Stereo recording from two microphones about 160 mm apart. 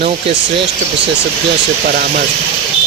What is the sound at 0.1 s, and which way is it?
Speech, 35° right (ahead or behind).